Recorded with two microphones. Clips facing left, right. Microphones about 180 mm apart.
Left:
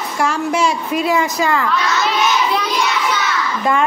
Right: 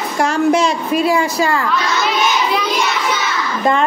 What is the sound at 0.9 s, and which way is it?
Speech, 20° left (ahead or behind).